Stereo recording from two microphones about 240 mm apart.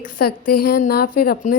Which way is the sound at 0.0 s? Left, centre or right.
Left.